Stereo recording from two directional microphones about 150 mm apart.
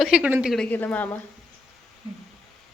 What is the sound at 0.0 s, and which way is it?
Speech, 5° right (ahead or behind).